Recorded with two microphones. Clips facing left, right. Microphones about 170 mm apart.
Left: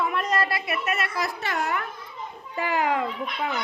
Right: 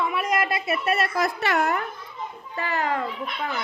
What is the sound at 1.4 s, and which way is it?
Speech, 70° right (ahead or behind).